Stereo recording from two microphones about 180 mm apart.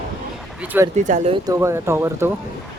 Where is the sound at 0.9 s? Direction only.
40° right (ahead or behind).